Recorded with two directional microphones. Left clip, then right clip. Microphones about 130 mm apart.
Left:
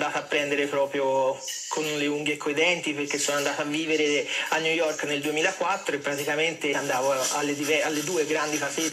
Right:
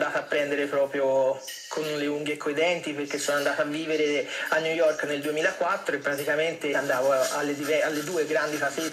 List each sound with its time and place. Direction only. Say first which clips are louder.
0.0 s speech: even; 20° left (ahead or behind)